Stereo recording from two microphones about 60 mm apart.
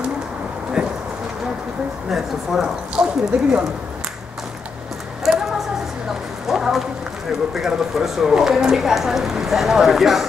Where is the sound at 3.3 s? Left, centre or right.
Centre.